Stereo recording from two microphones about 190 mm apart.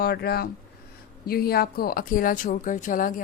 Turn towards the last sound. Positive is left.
turn(degrees=45)  # may be behind; listen again after turning